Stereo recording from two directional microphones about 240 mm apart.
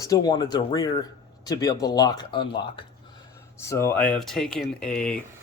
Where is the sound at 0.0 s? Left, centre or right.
Centre.